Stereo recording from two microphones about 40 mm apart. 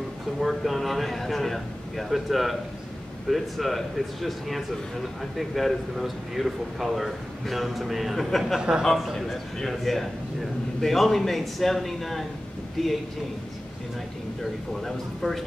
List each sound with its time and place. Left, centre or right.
0.4 s a man's voice: centre
8.5 s speech: centre
8.9 s a man's voice: centre
14.4 s a man's voice: centre